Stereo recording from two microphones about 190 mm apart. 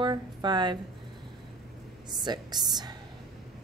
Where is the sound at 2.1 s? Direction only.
20° right (ahead or behind).